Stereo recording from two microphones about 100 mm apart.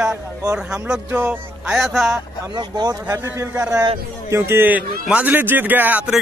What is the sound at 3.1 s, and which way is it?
A man's voice, 25° right (ahead or behind).